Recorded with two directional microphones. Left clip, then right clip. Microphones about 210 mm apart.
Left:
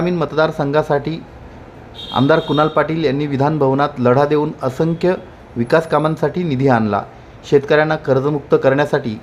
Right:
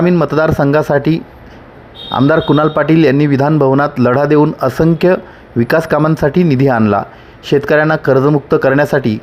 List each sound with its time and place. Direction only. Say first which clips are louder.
0.0 s speech: right 5 dB; 30° right (ahead or behind)